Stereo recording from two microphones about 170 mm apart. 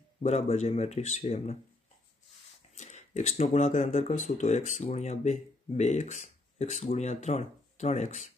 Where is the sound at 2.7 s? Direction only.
45° left (ahead or behind).